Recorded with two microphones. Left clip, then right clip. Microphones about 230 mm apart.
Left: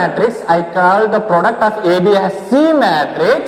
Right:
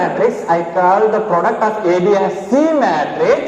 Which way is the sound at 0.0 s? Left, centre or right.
Left.